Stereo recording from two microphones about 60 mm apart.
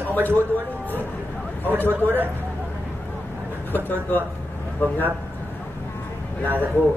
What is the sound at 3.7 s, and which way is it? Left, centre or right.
Speech, left.